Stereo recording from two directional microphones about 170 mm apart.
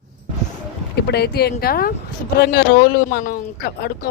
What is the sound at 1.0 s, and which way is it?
Speech, 75° left (ahead or behind).